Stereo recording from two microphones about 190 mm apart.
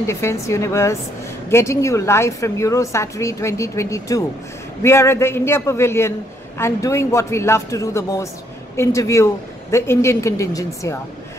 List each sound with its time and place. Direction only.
0.0 s a woman's voice: 15° left (ahead or behind)